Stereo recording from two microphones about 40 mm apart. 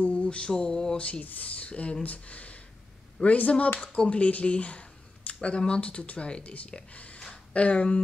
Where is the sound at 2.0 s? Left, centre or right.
Left.